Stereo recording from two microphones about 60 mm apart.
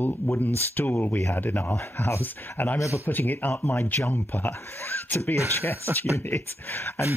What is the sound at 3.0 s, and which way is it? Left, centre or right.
Speech, left.